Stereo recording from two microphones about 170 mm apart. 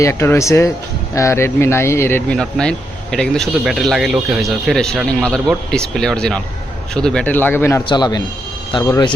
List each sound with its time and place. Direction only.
0.0 s speech: 15° left (ahead or behind)
7.9 s a man's voice: 25° left (ahead or behind)